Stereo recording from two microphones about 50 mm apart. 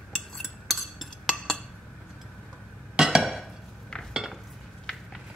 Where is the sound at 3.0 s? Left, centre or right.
Centre.